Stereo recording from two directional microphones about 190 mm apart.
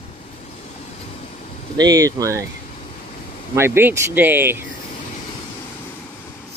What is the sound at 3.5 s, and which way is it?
Speech, 15° right (ahead or behind).